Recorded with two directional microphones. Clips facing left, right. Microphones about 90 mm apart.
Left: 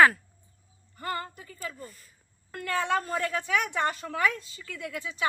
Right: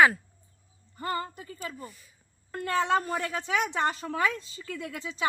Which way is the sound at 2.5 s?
25° right (ahead or behind).